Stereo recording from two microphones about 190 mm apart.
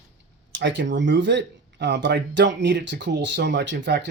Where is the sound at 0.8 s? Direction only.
70° right (ahead or behind).